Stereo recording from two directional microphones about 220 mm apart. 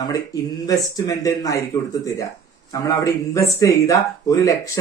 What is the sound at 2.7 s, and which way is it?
Speech, 15° left (ahead or behind).